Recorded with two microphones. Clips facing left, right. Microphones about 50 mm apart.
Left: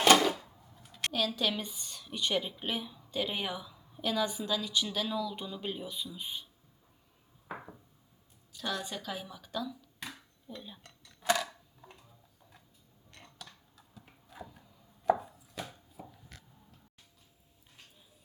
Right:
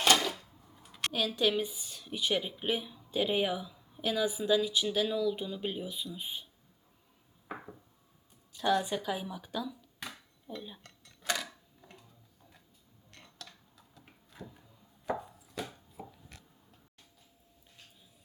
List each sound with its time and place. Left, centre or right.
0.9 s speech: centre
8.5 s a woman's voice: right
8.8 s speech: centre
10.8 s dishes: centre
13.1 s a sound: centre
15.2 s chopping: centre